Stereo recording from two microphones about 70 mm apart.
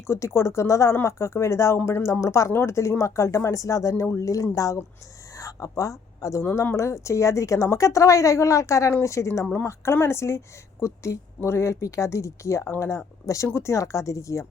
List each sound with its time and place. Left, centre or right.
0.1 s speech: left
5.3 s a sound: left
6.4 s speech: left